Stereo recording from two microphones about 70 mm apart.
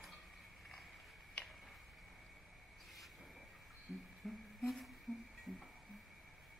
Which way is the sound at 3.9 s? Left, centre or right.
Centre.